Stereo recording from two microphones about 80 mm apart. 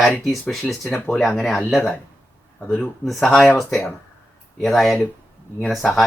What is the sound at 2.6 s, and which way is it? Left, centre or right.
Speech, left.